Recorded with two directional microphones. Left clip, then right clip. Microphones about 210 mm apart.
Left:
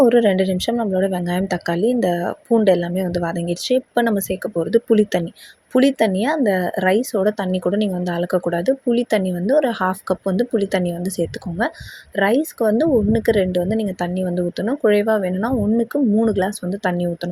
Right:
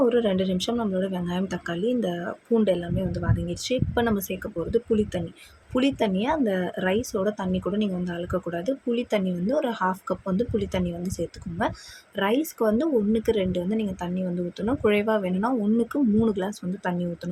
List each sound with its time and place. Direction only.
0.0 s speech: 25° left (ahead or behind)
12.1 s speech: 20° left (ahead or behind)